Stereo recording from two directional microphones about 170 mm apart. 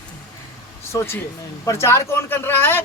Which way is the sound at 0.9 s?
15° left (ahead or behind).